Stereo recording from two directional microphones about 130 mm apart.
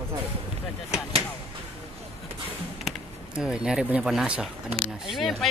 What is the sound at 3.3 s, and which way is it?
Speech, 5° right (ahead or behind).